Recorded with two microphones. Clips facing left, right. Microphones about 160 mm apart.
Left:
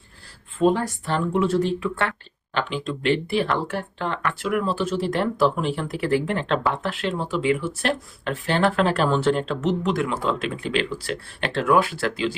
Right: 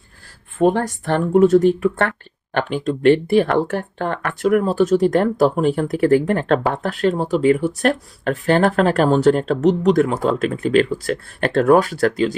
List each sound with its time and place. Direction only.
0.6 s speech: 60° right (ahead or behind)